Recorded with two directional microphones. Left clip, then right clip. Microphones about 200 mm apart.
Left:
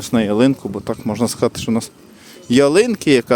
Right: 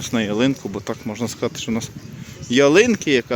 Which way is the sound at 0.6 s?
15° left (ahead or behind).